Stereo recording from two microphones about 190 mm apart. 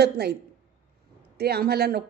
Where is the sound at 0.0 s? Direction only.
60° right (ahead or behind).